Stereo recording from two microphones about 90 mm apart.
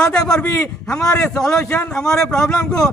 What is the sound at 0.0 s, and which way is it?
A man's voice, 10° left (ahead or behind).